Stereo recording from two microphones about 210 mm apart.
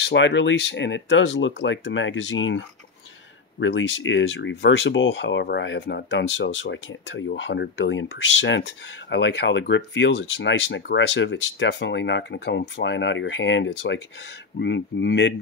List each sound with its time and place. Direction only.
0.0 s speech: 60° left (ahead or behind)